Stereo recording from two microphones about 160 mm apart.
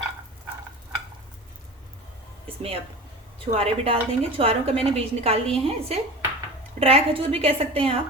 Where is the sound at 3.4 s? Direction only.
35° right (ahead or behind).